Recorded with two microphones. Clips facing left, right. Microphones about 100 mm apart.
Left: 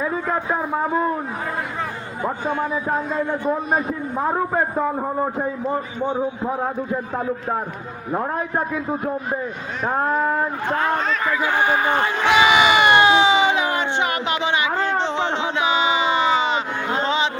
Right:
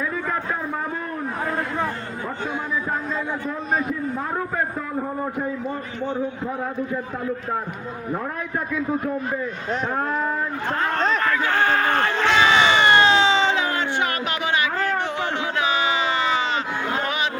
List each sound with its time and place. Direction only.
0.0 s a sound: 25° left (ahead or behind)
3.8 s a man's voice: 30° left (ahead or behind)
6.0 s a man's voice: 15° left (ahead or behind)
8.1 s a man's voice: 30° left (ahead or behind)
10.7 s speech: 5° left (ahead or behind)
11.3 s a sound: 10° left (ahead or behind)